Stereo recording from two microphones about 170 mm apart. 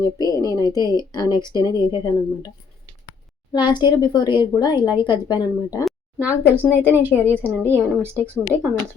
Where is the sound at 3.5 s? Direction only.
25° left (ahead or behind).